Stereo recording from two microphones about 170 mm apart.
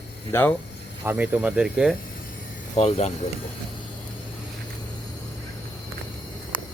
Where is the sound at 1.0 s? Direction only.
10° right (ahead or behind).